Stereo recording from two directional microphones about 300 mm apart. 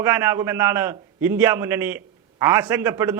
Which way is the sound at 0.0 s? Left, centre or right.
Centre.